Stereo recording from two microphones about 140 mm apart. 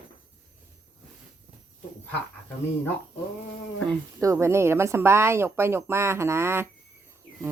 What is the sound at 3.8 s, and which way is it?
Speech, 20° right (ahead or behind).